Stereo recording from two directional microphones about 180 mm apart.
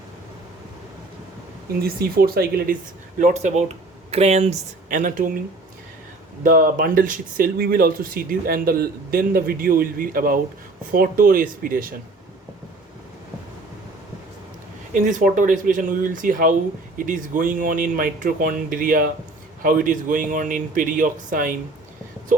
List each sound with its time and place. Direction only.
1.8 s speech: 55° right (ahead or behind)
3.2 s speech: 40° right (ahead or behind)
6.4 s speech: 50° right (ahead or behind)
14.9 s speech: 45° right (ahead or behind)